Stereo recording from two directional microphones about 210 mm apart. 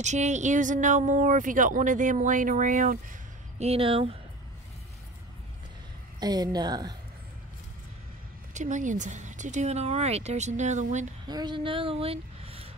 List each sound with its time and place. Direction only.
0.0 s speech: 35° right (ahead or behind)
6.1 s a woman's voice: 20° right (ahead or behind)
8.5 s speech: 35° right (ahead or behind)
11.2 s speech: 20° right (ahead or behind)